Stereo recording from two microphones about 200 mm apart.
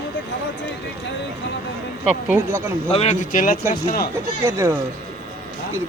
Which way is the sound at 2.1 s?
5° right (ahead or behind).